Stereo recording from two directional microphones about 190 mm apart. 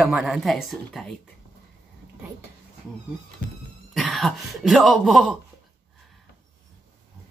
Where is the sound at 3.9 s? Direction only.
Centre (ahead or behind).